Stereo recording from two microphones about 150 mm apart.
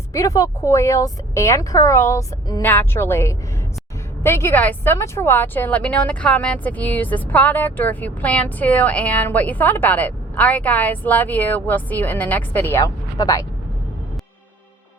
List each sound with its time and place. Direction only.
0.1 s a woman's voice: 20° left (ahead or behind)